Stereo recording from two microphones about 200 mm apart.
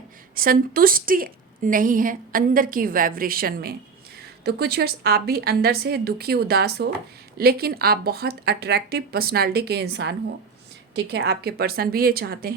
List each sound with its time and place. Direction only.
0.3 s a woman's voice: 45° right (ahead or behind)